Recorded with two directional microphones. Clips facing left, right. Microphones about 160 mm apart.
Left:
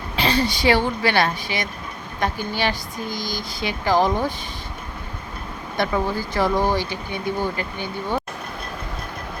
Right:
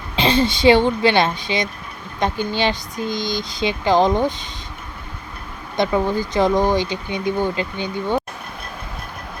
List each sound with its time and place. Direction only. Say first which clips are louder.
0.2 s speech: right 4 dB; 25° right (ahead or behind)
5.7 s speech: right 4 dB; 20° right (ahead or behind)